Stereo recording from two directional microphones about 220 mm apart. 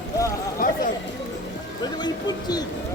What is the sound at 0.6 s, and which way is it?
Chatter, 40° left (ahead or behind).